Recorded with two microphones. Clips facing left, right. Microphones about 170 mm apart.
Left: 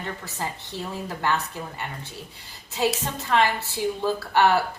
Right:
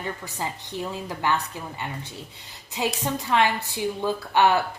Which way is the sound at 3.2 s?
15° right (ahead or behind).